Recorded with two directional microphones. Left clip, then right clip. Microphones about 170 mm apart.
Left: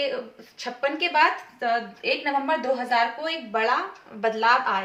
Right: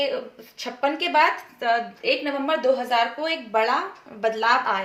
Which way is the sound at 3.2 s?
40° right (ahead or behind).